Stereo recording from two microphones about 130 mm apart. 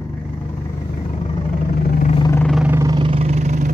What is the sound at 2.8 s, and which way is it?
Vehicle, 30° right (ahead or behind).